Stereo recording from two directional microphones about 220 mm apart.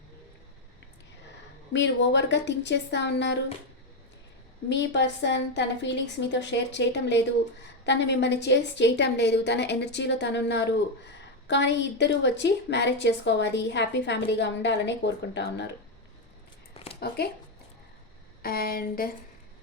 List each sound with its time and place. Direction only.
1.7 s a woman's voice: 55° left (ahead or behind)
4.7 s a woman's voice: 55° left (ahead or behind)
17.0 s a woman's voice: 45° left (ahead or behind)
18.4 s a sound: 45° left (ahead or behind)